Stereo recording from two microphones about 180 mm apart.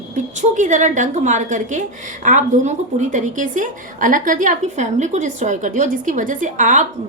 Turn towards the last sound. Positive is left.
turn(degrees=-45)  # may be behind; listen again after turning